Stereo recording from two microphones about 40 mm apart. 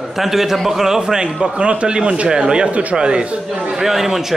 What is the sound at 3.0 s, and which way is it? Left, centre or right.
Speech, right.